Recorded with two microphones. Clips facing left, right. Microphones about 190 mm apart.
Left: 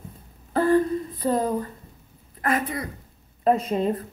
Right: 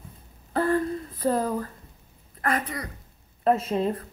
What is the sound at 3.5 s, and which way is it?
Speech, 5° right (ahead or behind).